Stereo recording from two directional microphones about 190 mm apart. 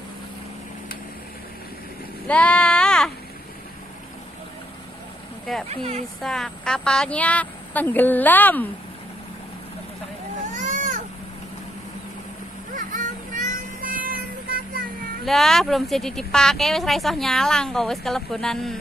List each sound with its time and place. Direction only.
2.2 s a sound: 5° left (ahead or behind)
5.7 s speech: 35° right (ahead or behind)
6.2 s a woman's voice: 5° left (ahead or behind)
10.5 s vehicle: 40° right (ahead or behind)
12.7 s vehicle: 45° right (ahead or behind)
15.2 s speech: centre (ahead or behind)